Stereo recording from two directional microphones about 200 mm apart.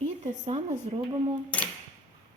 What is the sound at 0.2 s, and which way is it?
Speech, 35° right (ahead or behind).